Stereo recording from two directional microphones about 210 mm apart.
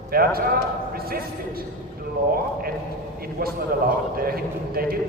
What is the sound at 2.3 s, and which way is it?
Speech, 45° right (ahead or behind).